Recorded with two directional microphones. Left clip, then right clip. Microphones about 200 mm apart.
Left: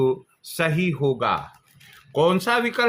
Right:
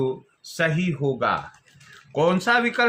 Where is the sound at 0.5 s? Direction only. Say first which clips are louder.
Even; 40° left (ahead or behind).